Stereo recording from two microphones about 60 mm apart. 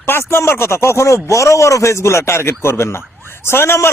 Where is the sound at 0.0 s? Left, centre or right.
Left.